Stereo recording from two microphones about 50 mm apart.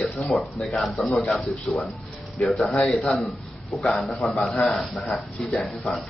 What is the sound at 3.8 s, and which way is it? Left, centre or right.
Speech, centre.